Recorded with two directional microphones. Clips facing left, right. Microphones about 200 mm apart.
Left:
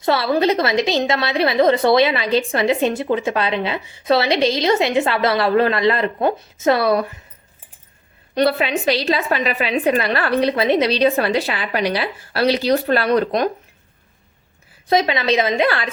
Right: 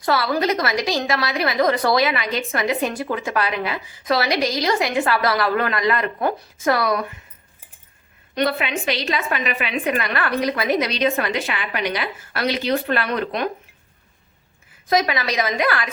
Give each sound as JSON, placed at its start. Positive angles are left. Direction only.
{"t": 0.0, "sound": "a woman's voice", "side_deg": 25}
{"t": 8.4, "sound": "a woman's voice", "side_deg": 35}
{"t": 14.8, "sound": "a woman's voice", "side_deg": 25}